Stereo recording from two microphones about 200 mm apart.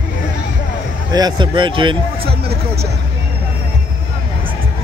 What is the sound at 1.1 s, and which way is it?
Speech, 20° right (ahead or behind).